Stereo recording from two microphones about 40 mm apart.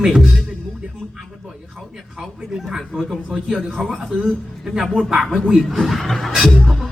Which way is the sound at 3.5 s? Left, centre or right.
Centre.